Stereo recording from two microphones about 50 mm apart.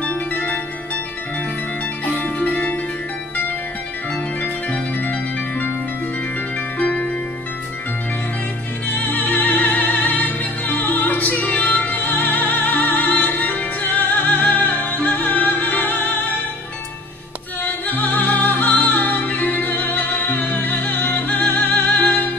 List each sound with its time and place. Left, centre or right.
0.0 s zither: left
2.1 s music: left
4.4 s music: left
6.8 s music: left
8.9 s music: left
17.8 s music: left